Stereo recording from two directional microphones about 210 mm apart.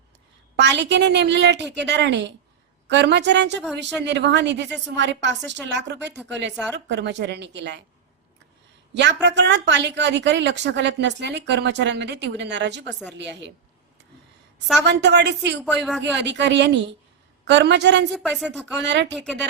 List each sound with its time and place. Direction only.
0.5 s a woman's voice: 55° right (ahead or behind)
9.2 s a woman's voice: 55° right (ahead or behind)
14.8 s a woman's voice: 55° right (ahead or behind)
15.6 s speech: 5° right (ahead or behind)
16.0 s a woman's voice: 55° right (ahead or behind)
18.1 s speech: centre (ahead or behind)
18.9 s a woman's voice: 55° right (ahead or behind)
19.1 s speech: centre (ahead or behind)